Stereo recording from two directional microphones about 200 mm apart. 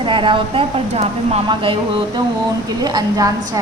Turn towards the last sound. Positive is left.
turn(degrees=-20)  # may be behind; listen again after turning